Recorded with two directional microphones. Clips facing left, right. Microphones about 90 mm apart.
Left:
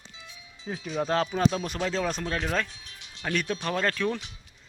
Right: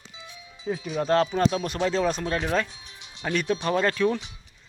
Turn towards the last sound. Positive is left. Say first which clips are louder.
# right 4 dB
turn(degrees=-5)  # may be behind; listen again after turning